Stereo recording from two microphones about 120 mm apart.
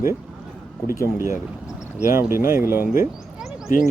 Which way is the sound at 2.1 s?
20° right (ahead or behind).